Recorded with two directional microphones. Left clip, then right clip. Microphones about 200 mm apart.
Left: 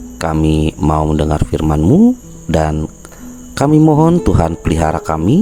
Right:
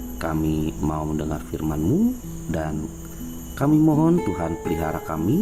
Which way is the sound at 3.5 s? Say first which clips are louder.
Left 9 dB; 50° left (ahead or behind).